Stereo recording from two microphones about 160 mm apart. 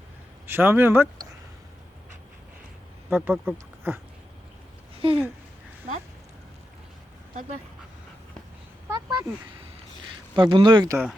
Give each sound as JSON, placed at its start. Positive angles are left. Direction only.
{"t": 0.4, "sound": "speech", "side_deg": -15}
{"t": 3.1, "sound": "speech", "side_deg": -10}
{"t": 4.9, "sound": "speech", "side_deg": -35}
{"t": 8.9, "sound": "speech", "side_deg": -20}
{"t": 10.3, "sound": "speech", "side_deg": -30}